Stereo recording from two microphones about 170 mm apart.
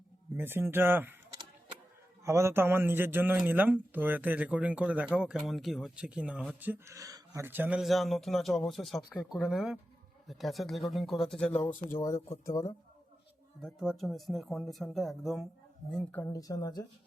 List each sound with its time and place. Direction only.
0.3 s a man's voice: 15° right (ahead or behind)
2.2 s a man's voice: 15° right (ahead or behind); by 11.5 s 5° left (ahead or behind)
11.9 s speech: 15° left (ahead or behind)
13.6 s speech: centre (ahead or behind)
16.2 s speech: 20° left (ahead or behind)